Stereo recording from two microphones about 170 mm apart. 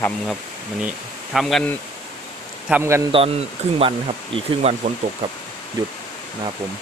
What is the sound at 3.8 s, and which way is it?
Speech, 35° right (ahead or behind).